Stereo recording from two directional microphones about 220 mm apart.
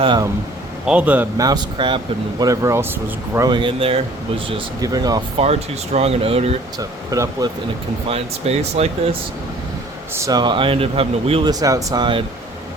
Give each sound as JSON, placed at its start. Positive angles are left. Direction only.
{"t": 0.0, "sound": "speech", "side_deg": -20}
{"t": 0.9, "sound": "speech", "side_deg": -5}
{"t": 6.7, "sound": "speech", "side_deg": -15}
{"t": 8.1, "sound": "speech", "side_deg": -30}
{"t": 10.2, "sound": "speech", "side_deg": -15}